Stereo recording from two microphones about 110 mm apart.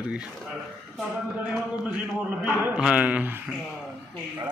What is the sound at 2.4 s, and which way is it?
Speech, 20° right (ahead or behind).